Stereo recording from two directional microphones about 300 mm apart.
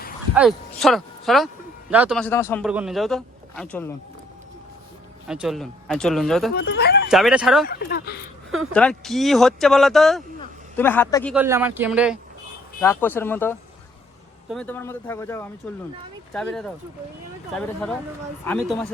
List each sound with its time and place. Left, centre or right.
0.3 s a man's voice: centre
5.3 s a man's voice: centre
6.5 s speech: left
7.1 s a man's voice: centre
7.7 s speech: left
8.7 s a man's voice: centre
11.3 s speech: centre
12.8 s a man's voice: centre
18.4 s a man's voice: centre